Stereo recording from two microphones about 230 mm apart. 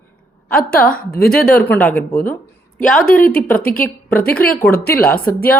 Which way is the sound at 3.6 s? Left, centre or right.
Left.